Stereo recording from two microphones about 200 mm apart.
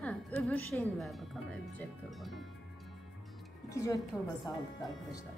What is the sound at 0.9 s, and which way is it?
Speech, centre (ahead or behind).